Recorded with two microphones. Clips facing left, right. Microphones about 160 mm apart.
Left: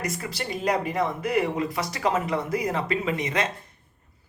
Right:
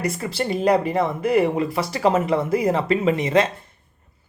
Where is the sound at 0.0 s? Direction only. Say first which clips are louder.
Right 7 dB; 30° right (ahead or behind).